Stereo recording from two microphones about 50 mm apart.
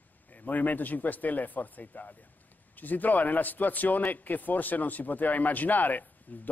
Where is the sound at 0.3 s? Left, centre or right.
Left.